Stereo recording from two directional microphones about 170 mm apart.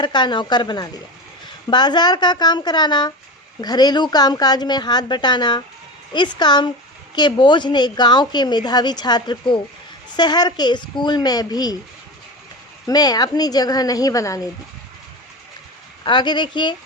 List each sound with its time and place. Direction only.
0.0 s a woman's voice: 25° left (ahead or behind)
12.9 s a woman's voice: 25° left (ahead or behind)
16.0 s a woman's voice: 25° left (ahead or behind)